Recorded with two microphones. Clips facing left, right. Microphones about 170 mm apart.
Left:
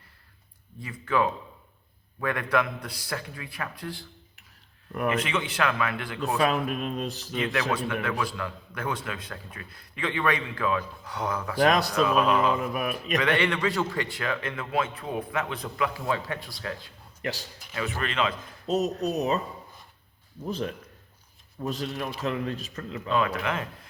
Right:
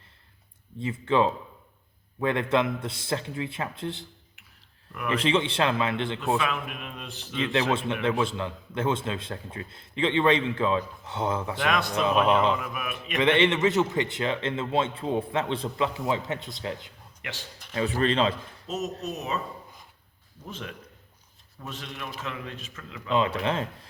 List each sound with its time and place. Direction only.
0.8 s speech: 25° right (ahead or behind)
5.0 s speech: 30° right (ahead or behind)
6.3 s a man's voice: 40° left (ahead or behind)
7.5 s speech: 25° right (ahead or behind)
11.6 s a man's voice: 35° left (ahead or behind)
12.0 s speech: 25° right (ahead or behind)
12.5 s a man's voice: 35° left (ahead or behind)
13.1 s speech: 20° right (ahead or behind)
17.2 s a man's voice: 40° left (ahead or behind)
17.7 s speech: 35° right (ahead or behind)
18.7 s a man's voice: 35° left (ahead or behind)
20.4 s a man's voice: 35° left (ahead or behind)
23.0 s speech: 25° right (ahead or behind)